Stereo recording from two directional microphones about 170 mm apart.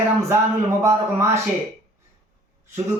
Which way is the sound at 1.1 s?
15° right (ahead or behind).